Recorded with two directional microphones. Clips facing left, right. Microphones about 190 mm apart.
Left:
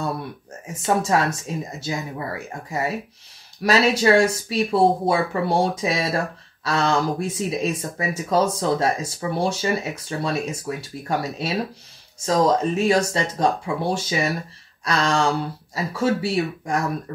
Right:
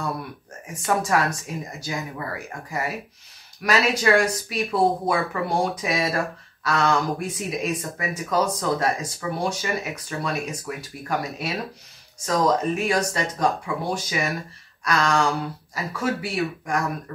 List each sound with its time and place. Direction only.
0.8 s speech: 25° left (ahead or behind)